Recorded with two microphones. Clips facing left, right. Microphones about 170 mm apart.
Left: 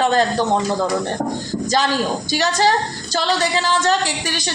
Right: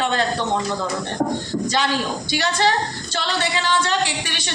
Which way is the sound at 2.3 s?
40° left (ahead or behind).